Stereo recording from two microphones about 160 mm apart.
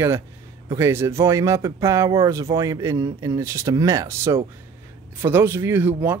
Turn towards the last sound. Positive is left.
turn(degrees=-10)  # may be behind; listen again after turning